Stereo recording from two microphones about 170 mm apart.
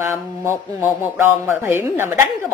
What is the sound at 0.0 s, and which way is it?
Speech, 15° right (ahead or behind).